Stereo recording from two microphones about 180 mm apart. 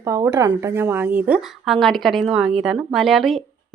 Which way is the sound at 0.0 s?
15° right (ahead or behind).